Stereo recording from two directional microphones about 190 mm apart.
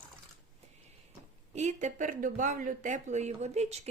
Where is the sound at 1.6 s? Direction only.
40° right (ahead or behind).